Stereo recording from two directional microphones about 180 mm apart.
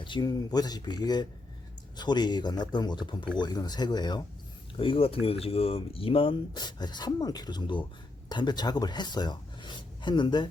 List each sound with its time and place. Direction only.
0.0 s speech: 25° left (ahead or behind)